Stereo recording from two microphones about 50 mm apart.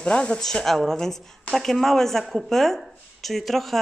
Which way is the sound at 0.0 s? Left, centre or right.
Centre.